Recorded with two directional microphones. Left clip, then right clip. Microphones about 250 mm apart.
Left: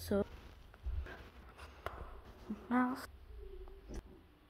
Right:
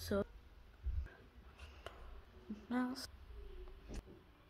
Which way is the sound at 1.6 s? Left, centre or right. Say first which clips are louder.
Left 7 dB; centre.